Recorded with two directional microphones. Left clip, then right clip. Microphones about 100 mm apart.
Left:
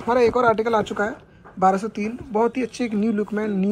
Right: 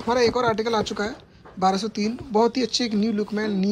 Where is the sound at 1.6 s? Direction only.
10° right (ahead or behind).